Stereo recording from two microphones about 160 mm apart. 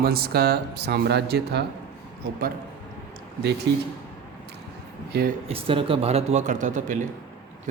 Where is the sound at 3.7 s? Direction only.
90° right.